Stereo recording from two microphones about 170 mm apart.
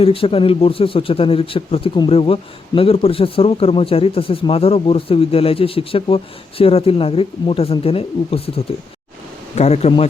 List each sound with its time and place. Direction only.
0.0 s speech: 35° left (ahead or behind)